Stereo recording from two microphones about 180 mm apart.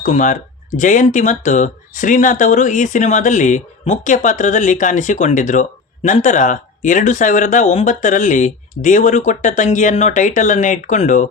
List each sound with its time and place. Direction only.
0.0 s speech: 45° left (ahead or behind)